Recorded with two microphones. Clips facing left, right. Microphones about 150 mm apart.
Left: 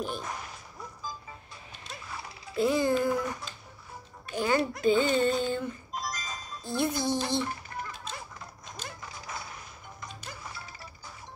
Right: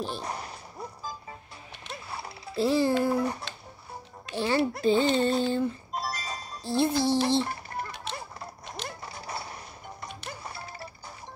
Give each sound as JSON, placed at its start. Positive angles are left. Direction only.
{"t": 0.0, "sound": "a sound", "side_deg": -35}
{"t": 2.0, "sound": "a child's voice", "side_deg": -35}
{"t": 7.2, "sound": "typing", "side_deg": -30}
{"t": 8.8, "sound": "music", "side_deg": -35}